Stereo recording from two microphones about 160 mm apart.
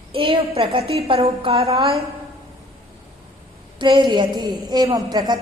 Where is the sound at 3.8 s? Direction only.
30° right (ahead or behind).